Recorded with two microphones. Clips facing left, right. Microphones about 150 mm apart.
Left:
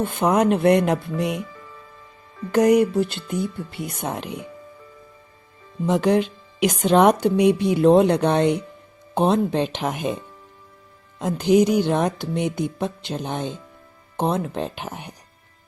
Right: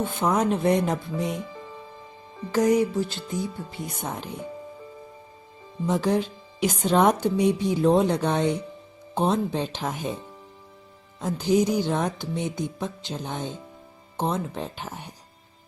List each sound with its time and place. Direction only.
0.0 s speech: 60° left (ahead or behind)
1.5 s music: 20° right (ahead or behind)
2.5 s speech: 65° left (ahead or behind)
5.8 s speech: 75° left (ahead or behind)
11.2 s speech: 70° left (ahead or behind)